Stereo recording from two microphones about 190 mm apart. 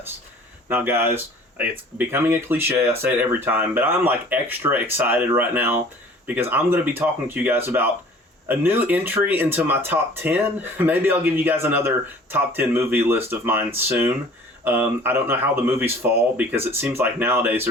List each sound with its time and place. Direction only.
0.7 s speech: 10° right (ahead or behind)